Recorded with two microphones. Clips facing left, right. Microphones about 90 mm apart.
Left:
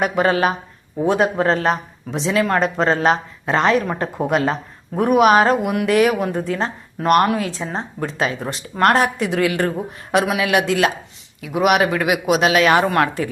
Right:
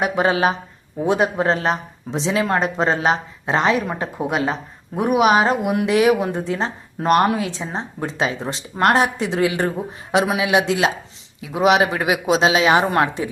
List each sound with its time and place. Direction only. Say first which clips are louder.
0.0 s a woman's voice: left 1 dB; 20° right (ahead or behind)
8.7 s speech: left 1 dB; 15° right (ahead or behind)